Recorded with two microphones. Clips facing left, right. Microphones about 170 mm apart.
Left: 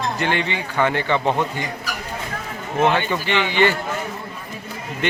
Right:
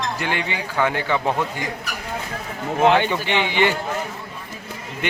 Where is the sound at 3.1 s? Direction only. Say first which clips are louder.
Left 1 dB; 15° right (ahead or behind).